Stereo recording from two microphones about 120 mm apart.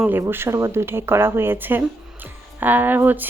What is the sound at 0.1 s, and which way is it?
Speech, 20° right (ahead or behind).